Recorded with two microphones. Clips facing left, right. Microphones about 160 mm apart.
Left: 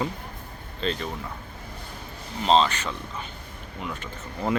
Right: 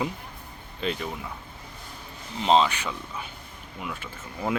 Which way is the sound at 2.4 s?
10° right (ahead or behind).